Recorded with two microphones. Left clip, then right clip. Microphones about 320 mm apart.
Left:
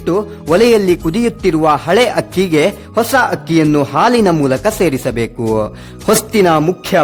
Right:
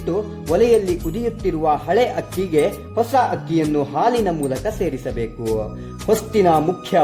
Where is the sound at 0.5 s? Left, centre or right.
Left.